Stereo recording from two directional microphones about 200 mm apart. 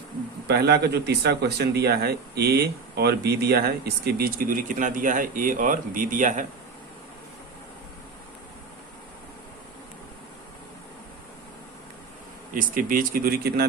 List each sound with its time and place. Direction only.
0.4 s speech: 55° right (ahead or behind)
12.5 s speech: 45° right (ahead or behind)